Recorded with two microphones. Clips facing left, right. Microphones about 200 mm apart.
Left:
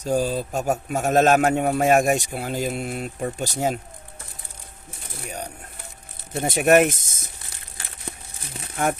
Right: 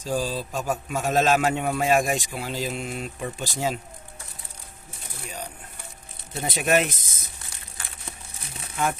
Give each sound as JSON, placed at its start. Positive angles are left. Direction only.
{"t": 0.1, "sound": "a man's voice", "side_deg": 45}
{"t": 6.4, "sound": "a man's voice", "side_deg": 50}
{"t": 8.7, "sound": "speech", "side_deg": 55}